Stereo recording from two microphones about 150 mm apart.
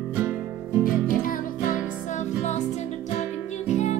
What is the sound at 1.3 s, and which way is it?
Music, 65° left (ahead or behind).